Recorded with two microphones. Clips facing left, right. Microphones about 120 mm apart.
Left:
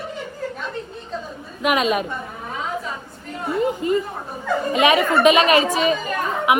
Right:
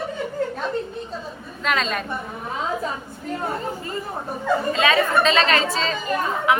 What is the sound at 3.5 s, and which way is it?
A woman's voice, 20° left (ahead or behind).